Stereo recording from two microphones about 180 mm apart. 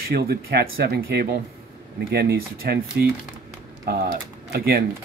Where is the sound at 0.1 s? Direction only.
60° right (ahead or behind).